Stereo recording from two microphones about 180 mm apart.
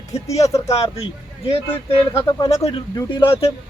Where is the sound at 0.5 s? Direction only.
35° left (ahead or behind).